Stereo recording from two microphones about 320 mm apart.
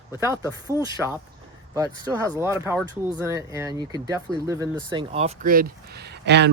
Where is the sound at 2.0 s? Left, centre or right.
Centre.